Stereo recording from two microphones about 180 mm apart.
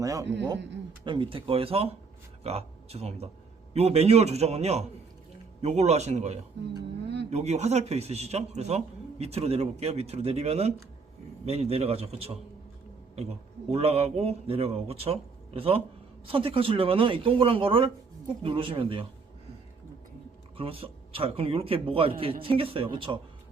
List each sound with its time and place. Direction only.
0.0 s a man's voice: 20° right (ahead or behind)
20.6 s a man's voice: 30° right (ahead or behind)